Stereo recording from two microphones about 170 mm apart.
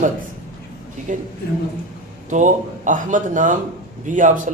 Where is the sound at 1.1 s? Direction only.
50° right (ahead or behind).